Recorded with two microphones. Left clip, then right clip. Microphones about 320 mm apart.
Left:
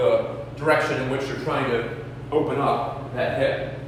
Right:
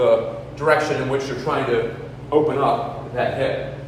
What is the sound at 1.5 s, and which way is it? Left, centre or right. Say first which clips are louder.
Speech: right 3 dB; centre.